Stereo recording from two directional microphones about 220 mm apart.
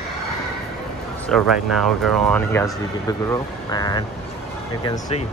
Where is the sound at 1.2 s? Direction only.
Centre (ahead or behind).